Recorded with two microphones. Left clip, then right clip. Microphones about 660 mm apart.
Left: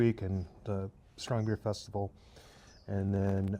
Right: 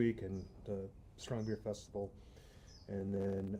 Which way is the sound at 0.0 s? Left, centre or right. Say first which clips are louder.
Left 6 dB; left.